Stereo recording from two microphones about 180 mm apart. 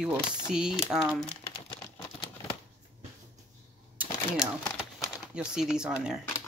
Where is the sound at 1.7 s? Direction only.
15° left (ahead or behind).